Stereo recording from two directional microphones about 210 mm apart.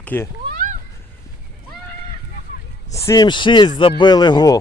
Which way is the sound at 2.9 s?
15° left (ahead or behind).